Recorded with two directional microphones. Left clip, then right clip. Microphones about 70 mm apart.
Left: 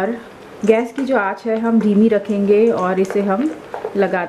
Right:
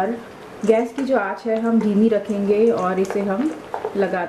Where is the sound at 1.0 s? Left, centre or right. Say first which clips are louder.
Left 3 dB; left.